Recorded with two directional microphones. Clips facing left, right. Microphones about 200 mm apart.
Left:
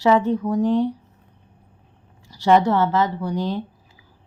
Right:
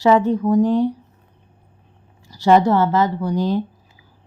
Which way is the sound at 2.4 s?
40° right (ahead or behind).